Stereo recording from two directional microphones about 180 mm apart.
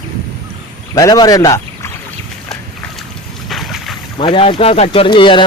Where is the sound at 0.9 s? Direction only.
20° left (ahead or behind).